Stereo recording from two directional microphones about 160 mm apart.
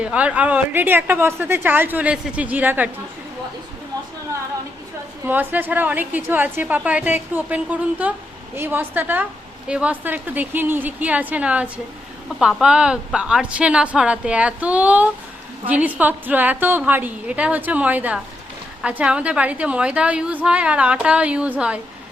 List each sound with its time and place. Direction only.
0.0 s a woman's voice: 5° right (ahead or behind)
5.2 s a woman's voice: 10° right (ahead or behind)